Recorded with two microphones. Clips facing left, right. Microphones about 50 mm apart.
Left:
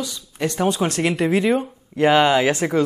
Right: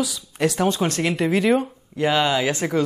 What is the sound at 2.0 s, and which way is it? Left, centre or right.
Speech, left.